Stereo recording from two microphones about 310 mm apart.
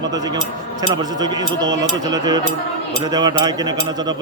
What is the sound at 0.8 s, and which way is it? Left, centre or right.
Speech, centre.